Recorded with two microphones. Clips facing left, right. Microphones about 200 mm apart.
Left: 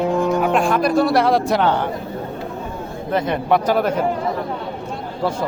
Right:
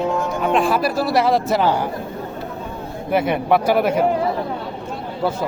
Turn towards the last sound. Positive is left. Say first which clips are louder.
# right 1 dB
turn(degrees=-10)  # may be behind; listen again after turning